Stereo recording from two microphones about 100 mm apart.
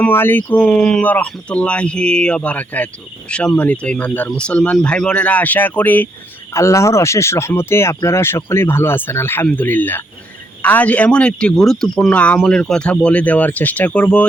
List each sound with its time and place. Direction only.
0.0 s speech: 20° left (ahead or behind)
0.7 s speech: 5° left (ahead or behind)
6.5 s speech: 30° left (ahead or behind); by 14.3 s 10° left (ahead or behind)